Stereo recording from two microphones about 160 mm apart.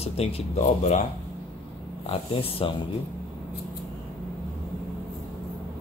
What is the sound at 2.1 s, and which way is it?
Speech, 35° left (ahead or behind).